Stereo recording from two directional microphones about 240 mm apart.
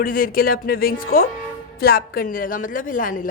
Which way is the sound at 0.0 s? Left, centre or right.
Left.